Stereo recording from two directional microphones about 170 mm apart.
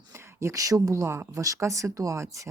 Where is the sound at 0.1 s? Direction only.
15° right (ahead or behind).